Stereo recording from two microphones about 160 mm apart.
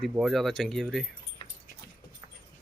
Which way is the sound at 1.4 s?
35° left (ahead or behind).